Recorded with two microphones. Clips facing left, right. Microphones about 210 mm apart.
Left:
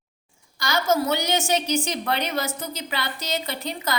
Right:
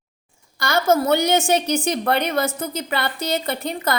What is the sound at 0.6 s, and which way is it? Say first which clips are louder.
A woman's voice: right 4 dB; 55° right (ahead or behind).